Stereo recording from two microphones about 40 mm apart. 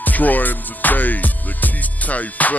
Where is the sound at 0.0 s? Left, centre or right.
Left.